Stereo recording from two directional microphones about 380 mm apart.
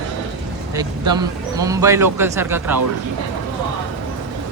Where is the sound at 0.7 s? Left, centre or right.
Centre.